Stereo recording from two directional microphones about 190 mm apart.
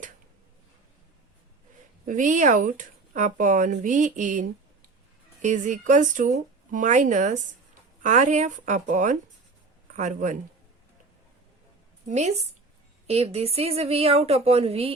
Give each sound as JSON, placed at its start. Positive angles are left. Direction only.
{"t": 2.0, "sound": "speech", "side_deg": -40}
{"t": 12.0, "sound": "speech", "side_deg": -35}